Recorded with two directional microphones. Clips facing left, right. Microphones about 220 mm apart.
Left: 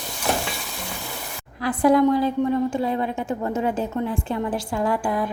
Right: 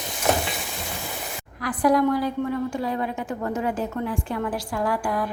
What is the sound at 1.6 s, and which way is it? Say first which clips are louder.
A woman's voice: left 3 dB; 25° left (ahead or behind).